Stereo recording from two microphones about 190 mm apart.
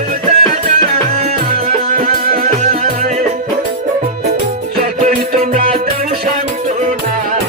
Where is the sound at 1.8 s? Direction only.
50° right (ahead or behind).